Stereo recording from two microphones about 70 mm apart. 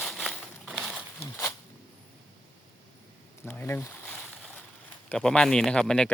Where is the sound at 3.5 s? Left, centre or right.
Left.